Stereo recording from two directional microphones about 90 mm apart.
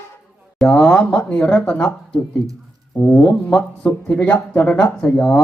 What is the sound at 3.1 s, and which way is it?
Speech, 10° left (ahead or behind).